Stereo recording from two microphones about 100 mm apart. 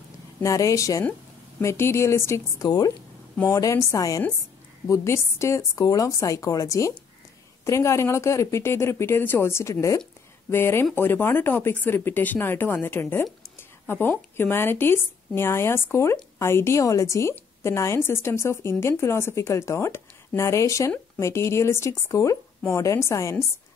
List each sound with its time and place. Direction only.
0.4 s a woman's voice: 35° left (ahead or behind)